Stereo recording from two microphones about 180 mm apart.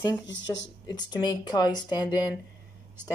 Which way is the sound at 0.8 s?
25° left (ahead or behind).